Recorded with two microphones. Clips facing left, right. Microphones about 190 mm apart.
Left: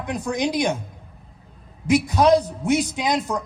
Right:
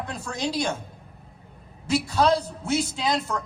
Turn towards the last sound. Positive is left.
turn(degrees=15)  # may be behind; listen again after turning